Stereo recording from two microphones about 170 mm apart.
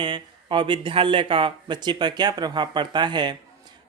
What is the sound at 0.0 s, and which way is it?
Speech, 30° right (ahead or behind).